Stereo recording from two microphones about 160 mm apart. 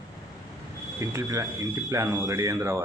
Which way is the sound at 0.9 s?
20° right (ahead or behind).